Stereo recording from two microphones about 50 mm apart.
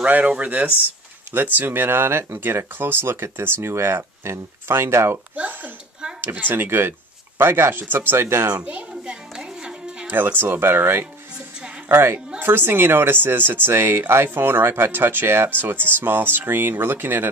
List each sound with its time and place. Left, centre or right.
0.0 s speech: right
1.3 s speech: right
3.7 s speech: right
5.3 s a sound: right
6.5 s speech: right
8.5 s speech: right
9.0 s a sound: centre
10.0 s a woman's voice: right
12.4 s speech: right